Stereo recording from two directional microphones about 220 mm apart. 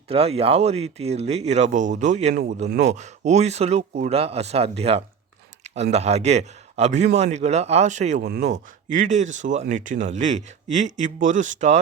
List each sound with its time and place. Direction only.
0.1 s speech: 25° right (ahead or behind)
8.2 s speech: 45° right (ahead or behind)
8.4 s speech: 35° right (ahead or behind)